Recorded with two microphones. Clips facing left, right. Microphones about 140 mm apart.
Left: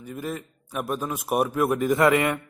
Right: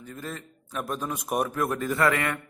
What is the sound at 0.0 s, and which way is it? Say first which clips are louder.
A man's voice: left 5 dB; 15° left (ahead or behind).